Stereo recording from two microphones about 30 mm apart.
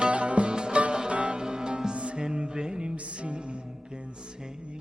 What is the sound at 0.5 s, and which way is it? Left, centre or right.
Music, right.